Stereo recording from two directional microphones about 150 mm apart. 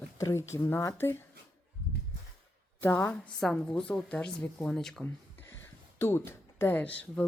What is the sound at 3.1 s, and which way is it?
A woman's voice, 5° left (ahead or behind).